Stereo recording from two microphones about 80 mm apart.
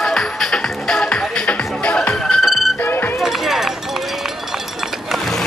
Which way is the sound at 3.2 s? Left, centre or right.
Centre.